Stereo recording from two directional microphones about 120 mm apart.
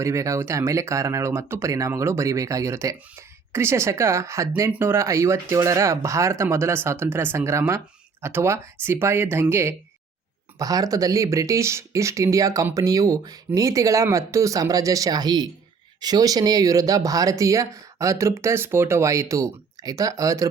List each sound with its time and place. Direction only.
0.0 s speech: 25° right (ahead or behind)